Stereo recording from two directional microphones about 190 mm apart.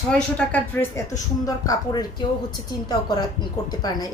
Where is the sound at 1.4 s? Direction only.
20° left (ahead or behind).